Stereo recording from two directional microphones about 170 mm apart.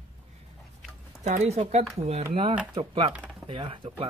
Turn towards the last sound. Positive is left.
turn(degrees=-30)  # may be behind; listen again after turning